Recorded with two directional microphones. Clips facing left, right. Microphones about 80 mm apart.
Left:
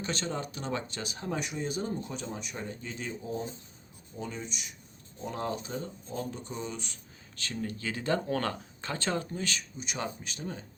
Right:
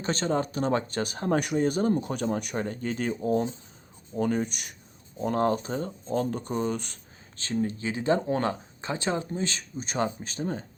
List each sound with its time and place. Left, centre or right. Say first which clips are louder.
0.0 s speech: right 7 dB; right
7.3 s speech: right 7 dB; right